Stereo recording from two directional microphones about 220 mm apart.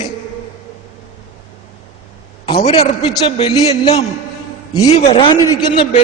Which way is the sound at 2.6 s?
30° left (ahead or behind).